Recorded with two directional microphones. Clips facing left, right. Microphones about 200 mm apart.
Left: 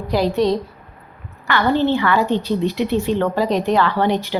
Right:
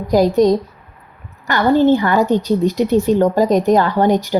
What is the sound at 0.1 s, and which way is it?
Speech, 45° right (ahead or behind).